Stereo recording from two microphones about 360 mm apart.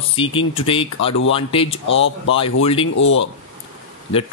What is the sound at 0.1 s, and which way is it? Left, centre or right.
Speech, centre.